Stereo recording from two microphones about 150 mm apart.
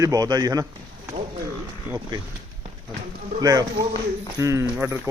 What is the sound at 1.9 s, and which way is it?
Speech, 10° right (ahead or behind).